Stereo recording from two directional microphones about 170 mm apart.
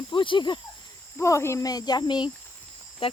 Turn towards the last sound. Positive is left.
turn(degrees=30)  # may be behind; listen again after turning